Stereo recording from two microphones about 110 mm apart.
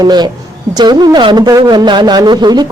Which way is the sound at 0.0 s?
40° right (ahead or behind).